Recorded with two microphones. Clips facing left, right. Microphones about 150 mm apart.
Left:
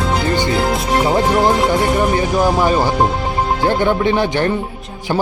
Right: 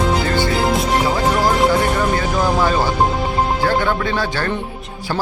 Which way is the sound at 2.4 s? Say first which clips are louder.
Left 3 dB; 15° left (ahead or behind).